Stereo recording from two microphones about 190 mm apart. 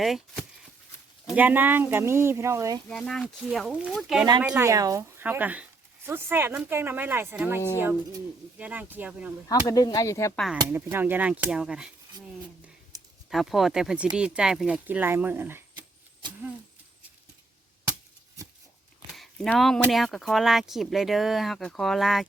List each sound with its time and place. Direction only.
0.0 s speech: centre (ahead or behind); by 2.8 s 15° right (ahead or behind)
2.9 s speech: centre (ahead or behind)
9.5 s speech: 20° left (ahead or behind)
10.3 s speech: centre (ahead or behind)
13.3 s speech: centre (ahead or behind)
19.1 s a sound: centre (ahead or behind)
19.9 s speech: centre (ahead or behind)